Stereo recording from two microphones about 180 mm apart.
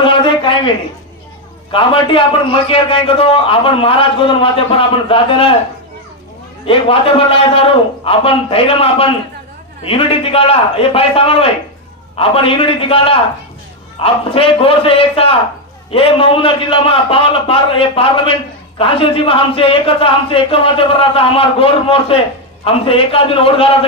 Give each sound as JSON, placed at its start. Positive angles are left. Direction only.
{"t": 0.0, "sound": "a sound", "side_deg": 25}
{"t": 1.7, "sound": "a man's voice", "side_deg": 30}
{"t": 6.6, "sound": "a man's voice", "side_deg": 30}